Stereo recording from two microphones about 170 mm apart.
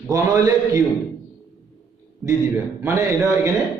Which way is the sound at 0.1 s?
20° right (ahead or behind).